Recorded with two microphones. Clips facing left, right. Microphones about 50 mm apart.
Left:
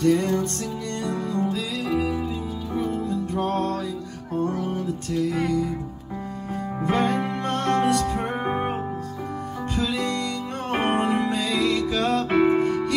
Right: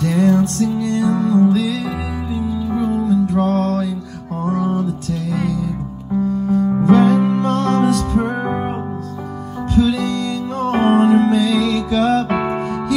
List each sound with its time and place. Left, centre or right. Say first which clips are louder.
0.0 s music: right 5 dB; centre
3.0 s music: right 10 dB; right
3.6 s music: right 7 dB; centre
6.9 s music: right 9 dB; centre
9.8 s music: right 10 dB; centre